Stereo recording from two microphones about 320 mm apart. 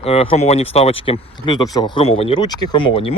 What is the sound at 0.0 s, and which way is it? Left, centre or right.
Speech, centre.